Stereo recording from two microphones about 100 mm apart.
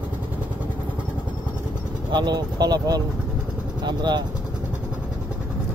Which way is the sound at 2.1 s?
45° right (ahead or behind).